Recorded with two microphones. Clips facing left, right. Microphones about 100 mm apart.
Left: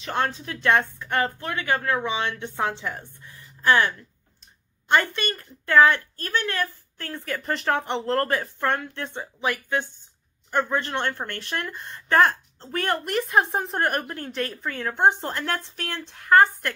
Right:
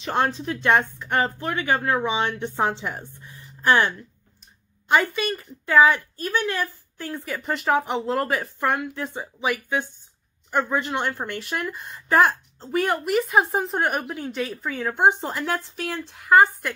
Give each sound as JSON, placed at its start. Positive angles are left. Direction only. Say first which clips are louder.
{"t": 0.0, "sound": "speech", "louder": "right 3 dB", "side_deg": -20}
{"t": 4.8, "sound": "a woman's voice", "louder": "right 1 dB", "side_deg": -5}